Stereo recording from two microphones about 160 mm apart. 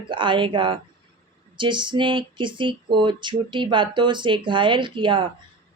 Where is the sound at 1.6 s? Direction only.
30° right (ahead or behind).